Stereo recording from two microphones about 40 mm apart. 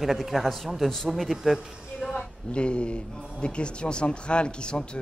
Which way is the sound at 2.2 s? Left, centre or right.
Left.